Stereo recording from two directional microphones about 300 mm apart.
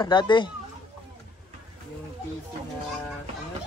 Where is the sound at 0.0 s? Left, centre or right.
Centre.